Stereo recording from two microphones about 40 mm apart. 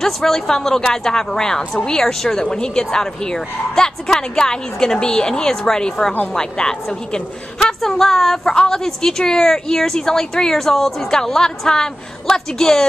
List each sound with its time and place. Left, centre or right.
0.0 s a woman's voice: centre
7.6 s a woman's voice: centre